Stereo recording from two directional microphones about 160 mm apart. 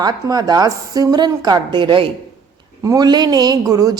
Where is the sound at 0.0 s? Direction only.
25° right (ahead or behind).